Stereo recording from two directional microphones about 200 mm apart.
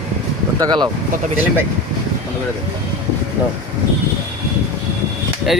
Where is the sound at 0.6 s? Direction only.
20° right (ahead or behind).